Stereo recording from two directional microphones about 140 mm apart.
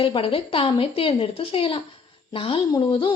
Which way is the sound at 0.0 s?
40° left (ahead or behind).